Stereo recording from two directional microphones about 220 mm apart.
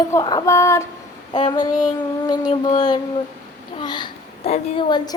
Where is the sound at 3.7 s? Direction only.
20° left (ahead or behind).